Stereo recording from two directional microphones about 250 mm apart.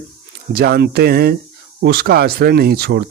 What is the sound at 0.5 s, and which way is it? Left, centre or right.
Speech, right.